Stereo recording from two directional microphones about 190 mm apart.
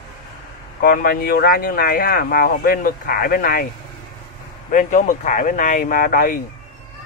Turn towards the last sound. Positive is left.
turn(degrees=45)  # may be behind; listen again after turning